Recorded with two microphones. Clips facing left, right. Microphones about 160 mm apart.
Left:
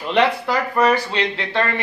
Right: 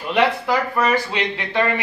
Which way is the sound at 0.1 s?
10° right (ahead or behind).